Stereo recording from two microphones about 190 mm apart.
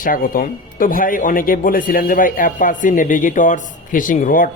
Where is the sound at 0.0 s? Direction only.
50° left (ahead or behind).